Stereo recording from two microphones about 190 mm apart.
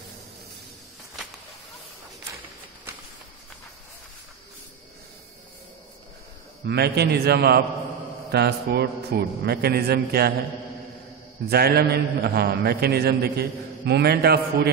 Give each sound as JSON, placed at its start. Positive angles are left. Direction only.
{"t": 6.6, "sound": "a man's voice", "side_deg": -60}
{"t": 11.4, "sound": "a man's voice", "side_deg": -55}